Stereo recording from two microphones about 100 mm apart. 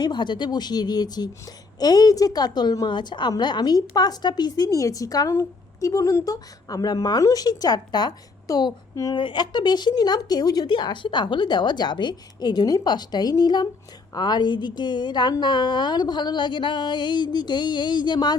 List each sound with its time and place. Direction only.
0.0 s a woman's voice: 50° left (ahead or behind)
9.1 s speech: 50° left (ahead or behind)